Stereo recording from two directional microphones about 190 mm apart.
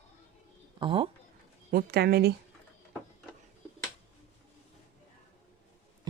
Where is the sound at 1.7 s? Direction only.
55° right (ahead or behind).